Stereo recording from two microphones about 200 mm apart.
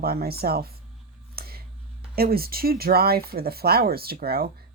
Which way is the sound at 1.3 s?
50° right (ahead or behind).